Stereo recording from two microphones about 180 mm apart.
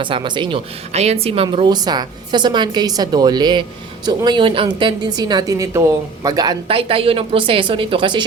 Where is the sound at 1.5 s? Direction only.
25° right (ahead or behind).